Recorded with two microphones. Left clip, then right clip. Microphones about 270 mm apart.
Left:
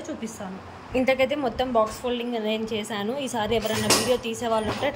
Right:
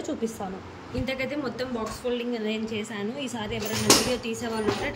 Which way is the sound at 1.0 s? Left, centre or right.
Centre.